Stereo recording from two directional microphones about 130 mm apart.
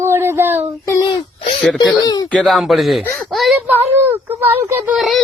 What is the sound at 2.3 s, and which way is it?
Speech, 5° left (ahead or behind).